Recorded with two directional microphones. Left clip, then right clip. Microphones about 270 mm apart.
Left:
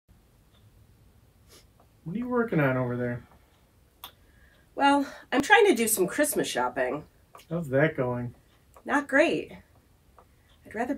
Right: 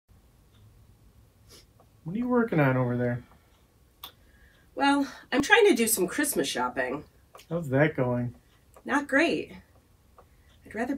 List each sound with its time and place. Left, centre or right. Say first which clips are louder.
2.1 s speech: right 1 dB; centre
4.7 s speech: left 2 dB; centre
7.4 s speech: even; centre
8.8 s speech: left 1 dB; centre
10.7 s speech: left 1 dB; centre